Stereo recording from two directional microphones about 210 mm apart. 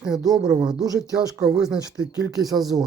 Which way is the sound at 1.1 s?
15° right (ahead or behind).